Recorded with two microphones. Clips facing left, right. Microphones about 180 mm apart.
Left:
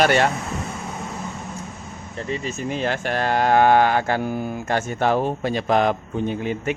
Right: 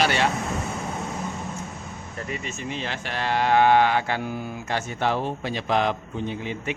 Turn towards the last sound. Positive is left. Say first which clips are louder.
# left 5 dB
turn(degrees=50)  # may be behind; listen again after turning